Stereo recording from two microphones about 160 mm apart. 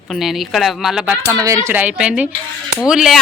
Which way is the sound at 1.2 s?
20° right (ahead or behind).